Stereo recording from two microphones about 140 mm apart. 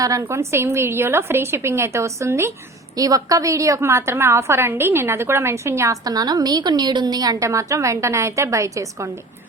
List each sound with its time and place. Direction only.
0.0 s a woman's voice: 25° right (ahead or behind)